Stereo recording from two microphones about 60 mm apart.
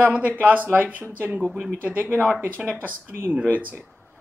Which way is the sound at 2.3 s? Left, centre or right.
Right.